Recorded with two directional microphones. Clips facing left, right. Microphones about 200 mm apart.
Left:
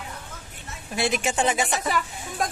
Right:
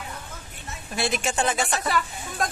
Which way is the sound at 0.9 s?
15° left (ahead or behind).